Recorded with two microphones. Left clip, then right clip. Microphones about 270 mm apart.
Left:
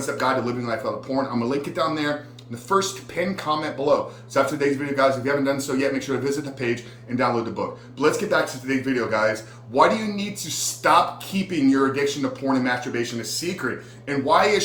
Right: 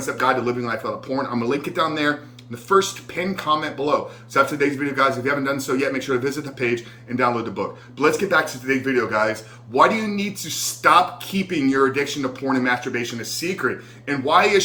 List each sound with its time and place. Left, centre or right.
0.0 s speech: centre